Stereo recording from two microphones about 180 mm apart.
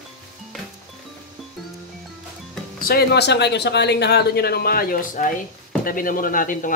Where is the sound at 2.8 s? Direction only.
60° left (ahead or behind).